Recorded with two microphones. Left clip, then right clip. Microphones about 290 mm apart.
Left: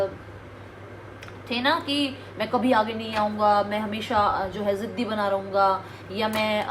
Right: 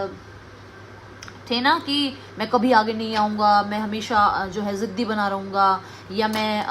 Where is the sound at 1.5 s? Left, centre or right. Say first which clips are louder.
Right 4 dB; right.